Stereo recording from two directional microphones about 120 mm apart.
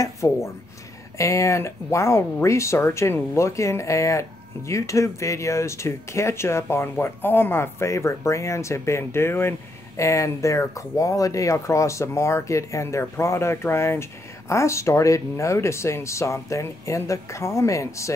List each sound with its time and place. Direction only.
0.2 s speech: 30° left (ahead or behind)